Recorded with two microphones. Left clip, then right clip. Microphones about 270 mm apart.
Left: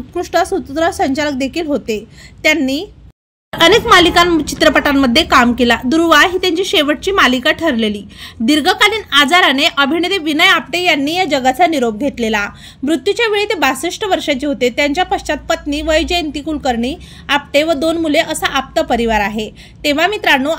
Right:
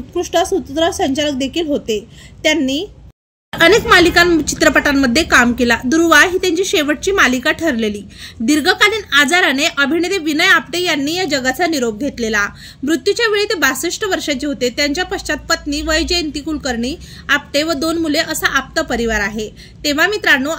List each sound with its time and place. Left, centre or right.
0.2 s a woman's voice: centre
3.5 s a woman's voice: centre